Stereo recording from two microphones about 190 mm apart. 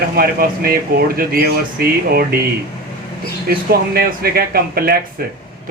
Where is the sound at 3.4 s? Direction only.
55° right (ahead or behind).